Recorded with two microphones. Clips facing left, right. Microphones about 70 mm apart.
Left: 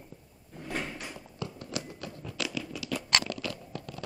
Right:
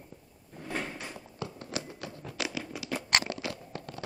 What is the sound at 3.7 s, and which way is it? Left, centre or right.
Biting, right.